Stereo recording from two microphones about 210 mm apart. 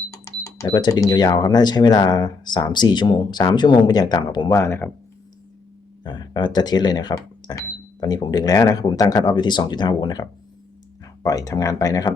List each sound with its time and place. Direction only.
0.1 s speech: 15° left (ahead or behind)
6.0 s speech: 20° left (ahead or behind)